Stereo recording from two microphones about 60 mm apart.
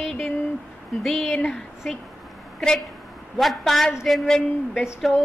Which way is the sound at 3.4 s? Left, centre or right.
Centre.